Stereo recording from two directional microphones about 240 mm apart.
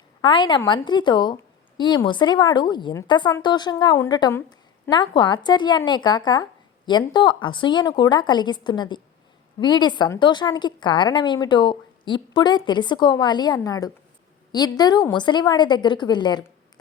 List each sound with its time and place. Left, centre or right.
0.2 s a woman's voice: centre